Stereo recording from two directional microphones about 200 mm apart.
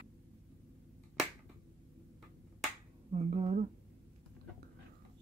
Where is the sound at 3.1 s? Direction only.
30° right (ahead or behind).